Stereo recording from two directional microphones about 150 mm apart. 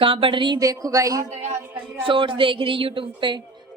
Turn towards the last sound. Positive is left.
turn(degrees=-35)  # may be behind; listen again after turning